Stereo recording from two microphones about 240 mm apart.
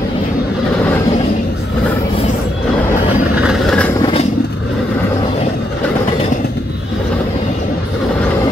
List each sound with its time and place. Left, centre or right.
3.3 s vehicle: centre
4.0 s vehicle: left